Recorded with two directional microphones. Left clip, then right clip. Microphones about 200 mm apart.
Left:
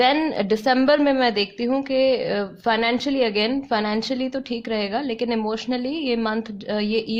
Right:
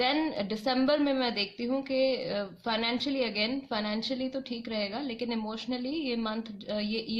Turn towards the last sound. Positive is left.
turn(degrees=40)  # may be behind; listen again after turning